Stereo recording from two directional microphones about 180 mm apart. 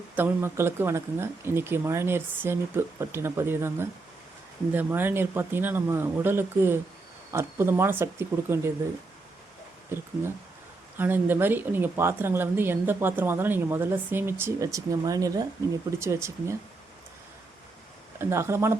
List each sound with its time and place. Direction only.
0.2 s speech: 15° right (ahead or behind)
9.9 s speech: 15° right (ahead or behind)
18.2 s speech: 15° right (ahead or behind)